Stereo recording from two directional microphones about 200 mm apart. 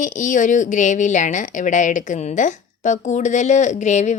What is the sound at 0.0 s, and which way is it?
A woman's voice, 40° left (ahead or behind).